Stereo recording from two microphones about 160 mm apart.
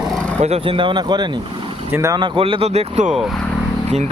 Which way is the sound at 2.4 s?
35° right (ahead or behind).